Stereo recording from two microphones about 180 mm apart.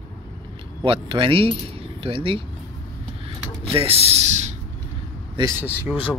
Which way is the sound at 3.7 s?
35° right (ahead or behind).